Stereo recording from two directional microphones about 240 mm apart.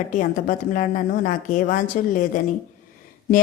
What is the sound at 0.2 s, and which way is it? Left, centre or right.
A woman's voice, left.